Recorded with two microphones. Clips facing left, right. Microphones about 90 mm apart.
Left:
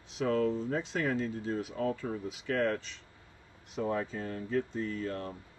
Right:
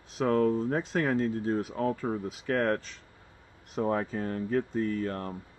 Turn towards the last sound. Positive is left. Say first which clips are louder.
# right 4 dB
turn(degrees=-55)  # may be behind; listen again after turning